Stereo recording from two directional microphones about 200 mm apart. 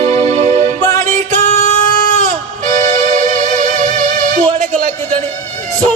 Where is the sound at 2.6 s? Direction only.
40° right (ahead or behind).